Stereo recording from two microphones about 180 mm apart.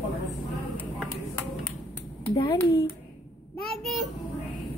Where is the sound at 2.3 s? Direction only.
20° left (ahead or behind).